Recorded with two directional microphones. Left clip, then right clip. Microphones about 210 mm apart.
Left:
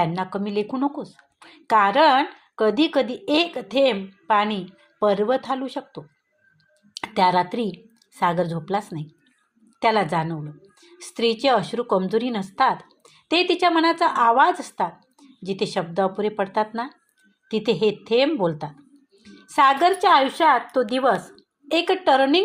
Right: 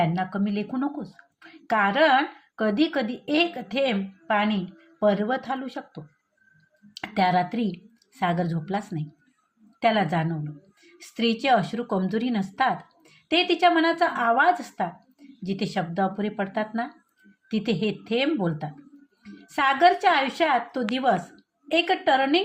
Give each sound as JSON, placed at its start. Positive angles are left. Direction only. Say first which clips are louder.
{"t": 0.0, "sound": "a woman's voice", "louder": "left 2 dB", "side_deg": 25}
{"t": 9.8, "sound": "a woman's voice", "louder": "left 3 dB", "side_deg": 25}